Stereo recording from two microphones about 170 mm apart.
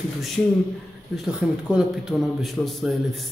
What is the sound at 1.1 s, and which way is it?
Speech, centre (ahead or behind).